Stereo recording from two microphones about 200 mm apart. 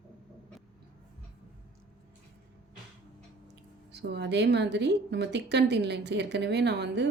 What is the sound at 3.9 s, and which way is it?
A woman's voice, 55° right (ahead or behind).